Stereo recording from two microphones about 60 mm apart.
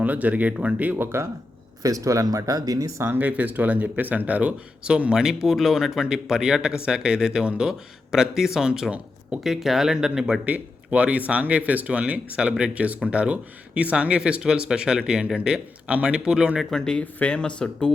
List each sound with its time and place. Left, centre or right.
0.0 s speech: right
0.9 s speech: right
1.8 s speech: right
3.2 s speech: right; by 10.4 s centre
10.4 s speech: right
16.7 s speech: centre